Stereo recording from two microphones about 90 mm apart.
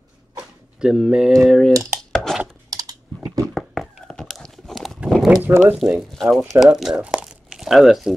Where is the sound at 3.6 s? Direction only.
Centre (ahead or behind).